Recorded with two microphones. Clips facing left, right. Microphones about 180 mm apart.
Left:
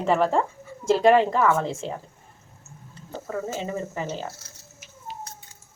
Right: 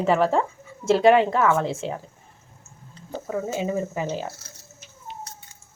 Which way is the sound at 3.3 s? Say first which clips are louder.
Right 3 dB; 10° right (ahead or behind).